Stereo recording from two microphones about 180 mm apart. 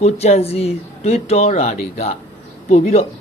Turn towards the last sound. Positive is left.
turn(degrees=35)  # may be behind; listen again after turning